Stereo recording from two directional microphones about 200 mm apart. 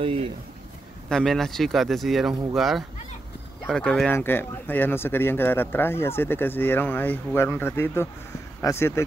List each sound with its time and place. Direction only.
0.0 s speech: 30° right (ahead or behind)
1.0 s speech: centre (ahead or behind)